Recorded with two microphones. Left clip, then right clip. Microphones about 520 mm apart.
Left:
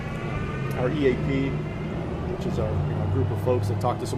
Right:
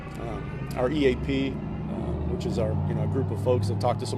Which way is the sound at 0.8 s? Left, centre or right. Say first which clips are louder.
Even; right.